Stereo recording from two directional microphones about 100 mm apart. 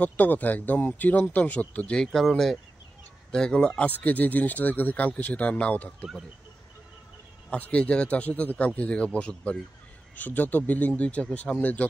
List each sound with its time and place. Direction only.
0.0 s speech: 15° left (ahead or behind)
7.4 s speech: 10° left (ahead or behind)